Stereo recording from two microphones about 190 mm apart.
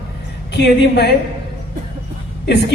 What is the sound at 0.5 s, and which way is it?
Speech, 60° left (ahead or behind).